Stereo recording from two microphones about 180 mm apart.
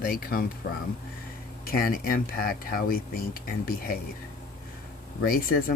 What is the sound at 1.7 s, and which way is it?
Speech, 55° left (ahead or behind).